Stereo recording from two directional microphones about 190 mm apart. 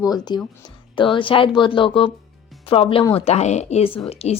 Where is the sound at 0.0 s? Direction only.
20° left (ahead or behind).